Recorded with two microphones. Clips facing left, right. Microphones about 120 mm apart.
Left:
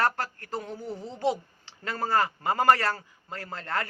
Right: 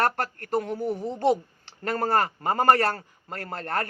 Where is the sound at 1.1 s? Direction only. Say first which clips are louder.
Right 3 dB; 55° right (ahead or behind).